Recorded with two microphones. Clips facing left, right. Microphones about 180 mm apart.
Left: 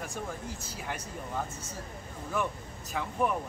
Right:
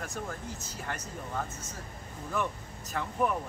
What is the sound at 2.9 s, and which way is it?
Speech, 5° left (ahead or behind).